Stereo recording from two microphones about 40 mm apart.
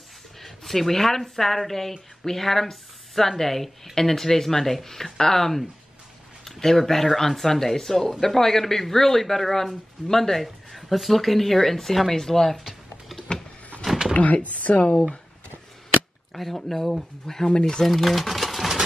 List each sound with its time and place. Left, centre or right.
0.4 s speech: centre
14.1 s speech: left
16.3 s speech: centre
17.8 s a sound: centre